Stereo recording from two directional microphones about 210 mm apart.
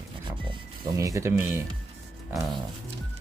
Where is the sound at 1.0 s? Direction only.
15° right (ahead or behind).